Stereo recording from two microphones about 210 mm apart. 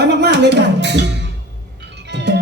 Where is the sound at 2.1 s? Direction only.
55° right (ahead or behind).